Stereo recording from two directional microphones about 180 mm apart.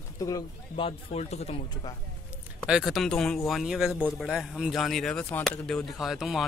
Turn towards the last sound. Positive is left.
turn(degrees=0)  # may be behind; listen again after turning